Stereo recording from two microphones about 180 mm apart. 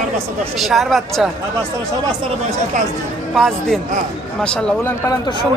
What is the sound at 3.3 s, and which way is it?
Speech, centre (ahead or behind).